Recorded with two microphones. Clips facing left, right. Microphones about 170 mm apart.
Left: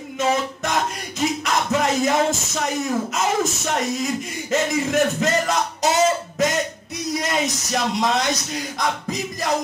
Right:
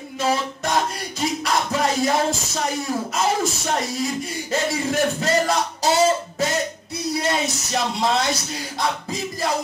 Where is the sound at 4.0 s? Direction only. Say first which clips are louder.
Even; 35° right (ahead or behind).